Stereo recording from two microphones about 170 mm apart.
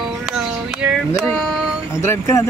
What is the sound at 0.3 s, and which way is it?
Music, 5° right (ahead or behind).